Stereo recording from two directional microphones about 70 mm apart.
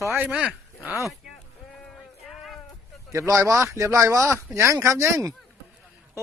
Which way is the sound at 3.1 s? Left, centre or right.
Right.